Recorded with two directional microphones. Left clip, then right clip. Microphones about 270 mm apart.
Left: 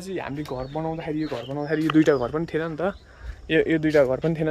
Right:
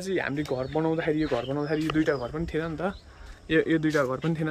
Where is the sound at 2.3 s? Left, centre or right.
Centre.